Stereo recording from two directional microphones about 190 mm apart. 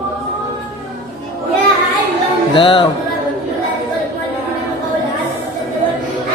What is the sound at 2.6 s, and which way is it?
Speech, 25° left (ahead or behind).